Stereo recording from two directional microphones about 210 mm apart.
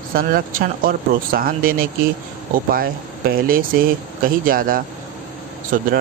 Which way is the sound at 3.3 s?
45° right (ahead or behind).